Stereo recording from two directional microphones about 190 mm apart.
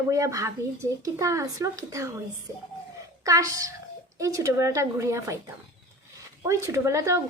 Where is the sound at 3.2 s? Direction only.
15° right (ahead or behind).